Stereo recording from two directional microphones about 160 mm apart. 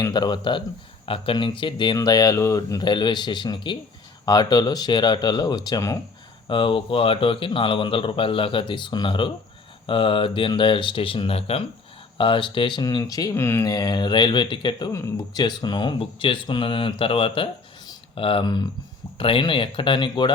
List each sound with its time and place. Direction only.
0.0 s speech: 25° left (ahead or behind)
6.5 s speech: 30° left (ahead or behind)